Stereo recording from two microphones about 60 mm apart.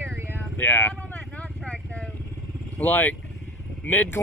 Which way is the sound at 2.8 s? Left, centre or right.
Left.